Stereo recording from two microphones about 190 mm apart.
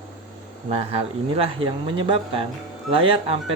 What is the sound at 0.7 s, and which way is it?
Speech, 30° right (ahead or behind).